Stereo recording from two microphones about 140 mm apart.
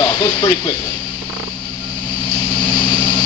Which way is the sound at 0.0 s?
30° left (ahead or behind).